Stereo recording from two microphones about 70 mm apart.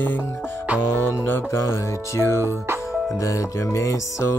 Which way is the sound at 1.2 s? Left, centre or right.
Left.